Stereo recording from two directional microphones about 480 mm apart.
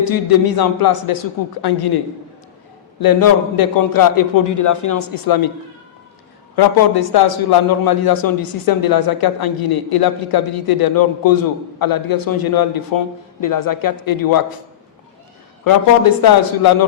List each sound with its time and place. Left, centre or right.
0.0 s a man's voice: left
3.0 s a man's voice: left
6.6 s a man's voice: left
15.6 s a man's voice: left